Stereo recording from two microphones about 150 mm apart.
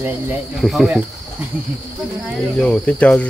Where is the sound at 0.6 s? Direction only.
Centre (ahead or behind).